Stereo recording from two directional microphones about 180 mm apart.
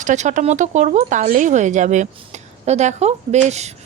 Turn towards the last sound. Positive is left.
turn(degrees=-40)  # may be behind; listen again after turning